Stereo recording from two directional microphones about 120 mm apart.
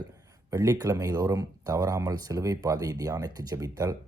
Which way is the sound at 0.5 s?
25° right (ahead or behind).